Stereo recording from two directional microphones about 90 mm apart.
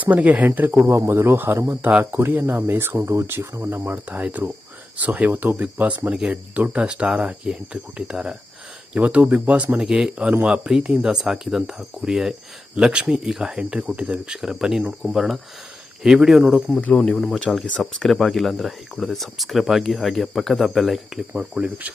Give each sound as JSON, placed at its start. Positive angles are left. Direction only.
{"t": 0.0, "sound": "speech", "side_deg": -15}
{"t": 1.9, "sound": "speech", "side_deg": -20}
{"t": 16.7, "sound": "speech", "side_deg": 10}
{"t": 21.3, "sound": "speech", "side_deg": -10}